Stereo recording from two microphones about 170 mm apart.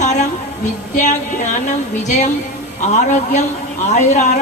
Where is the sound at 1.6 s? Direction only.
45° left (ahead or behind).